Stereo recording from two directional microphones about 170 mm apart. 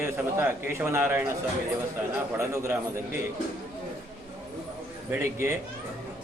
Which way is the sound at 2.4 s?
15° right (ahead or behind).